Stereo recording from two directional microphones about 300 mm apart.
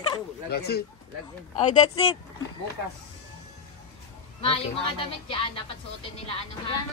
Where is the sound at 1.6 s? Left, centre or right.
Centre.